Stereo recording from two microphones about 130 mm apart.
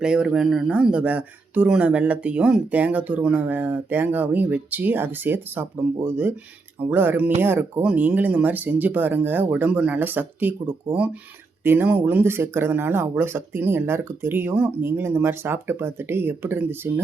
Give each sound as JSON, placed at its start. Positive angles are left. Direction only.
{"t": 0.0, "sound": "speech", "side_deg": -5}